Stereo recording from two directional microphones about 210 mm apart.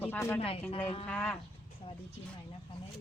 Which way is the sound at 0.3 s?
25° left (ahead or behind).